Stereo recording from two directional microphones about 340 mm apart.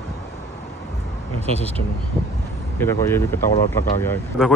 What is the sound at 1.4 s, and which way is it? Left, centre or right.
Speech, centre.